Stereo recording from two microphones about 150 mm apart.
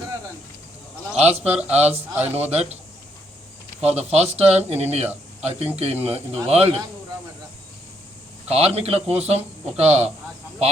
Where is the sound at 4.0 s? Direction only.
45° right (ahead or behind).